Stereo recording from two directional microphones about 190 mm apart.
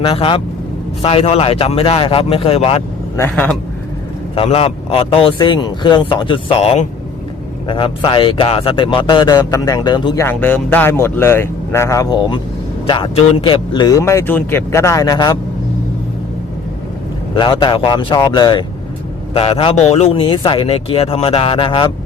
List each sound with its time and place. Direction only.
0.1 s speech: 30° left (ahead or behind)
3.2 s speech: 10° left (ahead or behind)
4.4 s speech: 30° left (ahead or behind)
10.2 s speech: 10° left (ahead or behind)
17.3 s speech: 25° left (ahead or behind)